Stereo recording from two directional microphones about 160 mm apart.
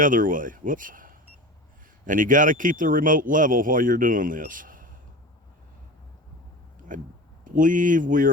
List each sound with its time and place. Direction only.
0.0 s speech: 55° right (ahead or behind)
6.7 s a sound: 55° right (ahead or behind)
7.4 s speech: 55° right (ahead or behind)